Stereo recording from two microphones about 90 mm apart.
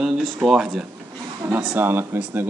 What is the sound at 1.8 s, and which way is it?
Speech, 25° right (ahead or behind).